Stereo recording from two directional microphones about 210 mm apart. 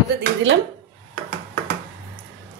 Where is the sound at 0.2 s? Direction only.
65° right (ahead or behind).